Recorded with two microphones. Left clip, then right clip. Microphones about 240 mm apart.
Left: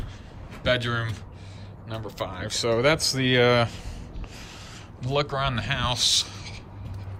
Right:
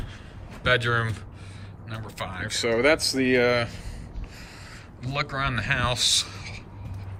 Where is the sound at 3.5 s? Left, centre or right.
Centre.